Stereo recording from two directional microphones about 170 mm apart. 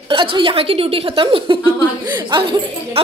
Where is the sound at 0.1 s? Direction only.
30° right (ahead or behind).